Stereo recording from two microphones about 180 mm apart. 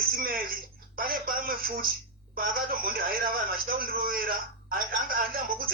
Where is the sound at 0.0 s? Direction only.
55° right (ahead or behind).